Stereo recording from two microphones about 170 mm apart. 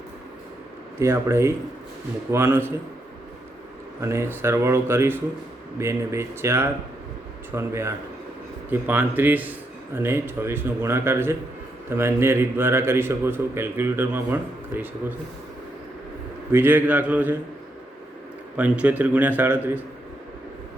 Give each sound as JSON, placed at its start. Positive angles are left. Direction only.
{"t": 0.9, "sound": "a man's voice", "side_deg": -15}
{"t": 4.0, "sound": "a man's voice", "side_deg": -15}
{"t": 16.5, "sound": "a man's voice", "side_deg": -10}
{"t": 18.5, "sound": "a man's voice", "side_deg": -10}